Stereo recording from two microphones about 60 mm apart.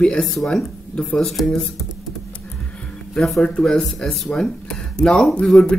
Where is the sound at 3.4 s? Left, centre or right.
Centre.